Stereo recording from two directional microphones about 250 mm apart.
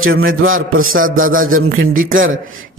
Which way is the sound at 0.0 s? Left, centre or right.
Right.